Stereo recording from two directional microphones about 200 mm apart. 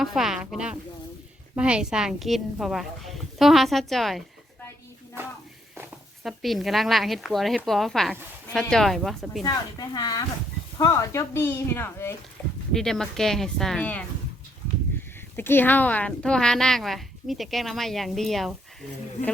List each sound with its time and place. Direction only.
0.0 s a woman's voice: centre (ahead or behind)
5.2 s speech: 10° right (ahead or behind)
6.2 s a woman's voice: centre (ahead or behind)
9.4 s a woman's voice: 20° left (ahead or behind)
15.4 s a woman's voice: 10° left (ahead or behind)